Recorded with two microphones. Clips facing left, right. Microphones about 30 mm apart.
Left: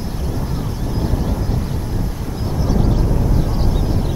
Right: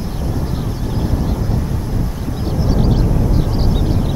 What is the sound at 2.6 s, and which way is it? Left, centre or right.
Vehicle, right.